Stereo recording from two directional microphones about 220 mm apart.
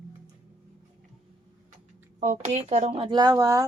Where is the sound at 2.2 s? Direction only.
35° right (ahead or behind); by 3.6 s 15° right (ahead or behind).